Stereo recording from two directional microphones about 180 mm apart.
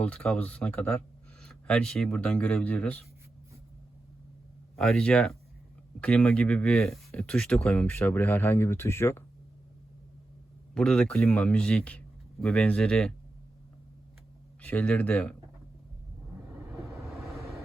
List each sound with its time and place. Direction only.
0.0 s speech: 5° left (ahead or behind)
4.8 s a man's voice: 5° left (ahead or behind)
10.8 s a man's voice: 5° left (ahead or behind)
14.6 s speech: 10° left (ahead or behind)